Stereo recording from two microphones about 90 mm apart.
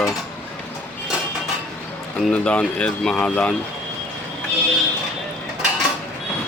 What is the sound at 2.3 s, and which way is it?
Speech, 10° left (ahead or behind).